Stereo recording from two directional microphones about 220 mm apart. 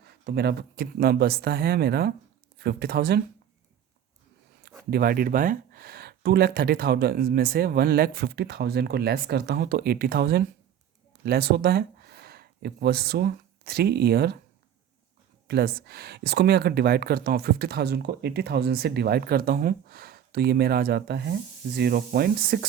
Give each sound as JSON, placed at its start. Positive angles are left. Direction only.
{"t": 0.0, "sound": "speech", "side_deg": -45}
{"t": 4.9, "sound": "speech", "side_deg": -40}
{"t": 15.4, "sound": "speech", "side_deg": -45}